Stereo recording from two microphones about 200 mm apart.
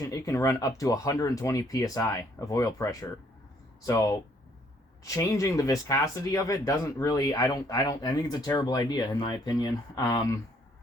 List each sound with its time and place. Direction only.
0.0 s speech: 15° left (ahead or behind)